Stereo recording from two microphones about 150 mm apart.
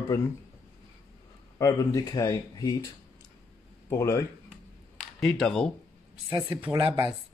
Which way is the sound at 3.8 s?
20° left (ahead or behind).